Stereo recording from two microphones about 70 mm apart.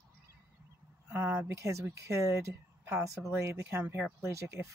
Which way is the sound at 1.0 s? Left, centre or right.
Right.